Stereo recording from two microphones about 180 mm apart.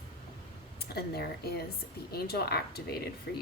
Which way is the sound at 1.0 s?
60° left (ahead or behind).